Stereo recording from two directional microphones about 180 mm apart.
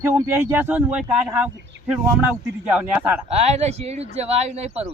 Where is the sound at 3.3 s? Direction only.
35° right (ahead or behind).